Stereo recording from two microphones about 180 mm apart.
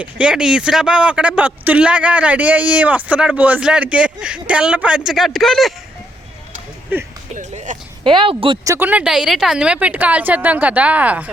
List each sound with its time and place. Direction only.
0.0 s speech: 5° right (ahead or behind)
6.9 s speech: 10° right (ahead or behind)
7.3 s speech: 45° right (ahead or behind)
8.0 s speech: 30° right (ahead or behind)
8.6 s speech: 15° right (ahead or behind)